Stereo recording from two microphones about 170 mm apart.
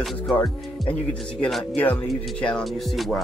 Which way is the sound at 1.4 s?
Centre (ahead or behind).